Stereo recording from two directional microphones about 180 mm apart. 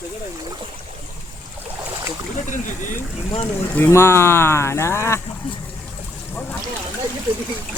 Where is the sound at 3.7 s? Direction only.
15° left (ahead or behind).